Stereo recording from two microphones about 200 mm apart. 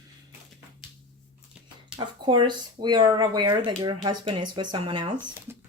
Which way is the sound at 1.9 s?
20° right (ahead or behind).